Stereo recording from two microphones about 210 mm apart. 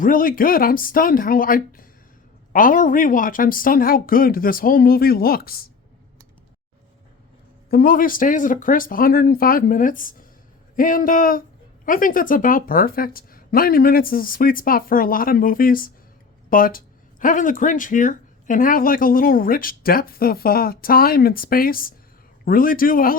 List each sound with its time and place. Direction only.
0.0 s speech: 40° left (ahead or behind)
7.7 s speech: 45° left (ahead or behind)